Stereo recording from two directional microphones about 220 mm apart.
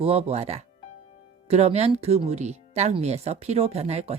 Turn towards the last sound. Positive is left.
turn(degrees=-30)  # may be behind; listen again after turning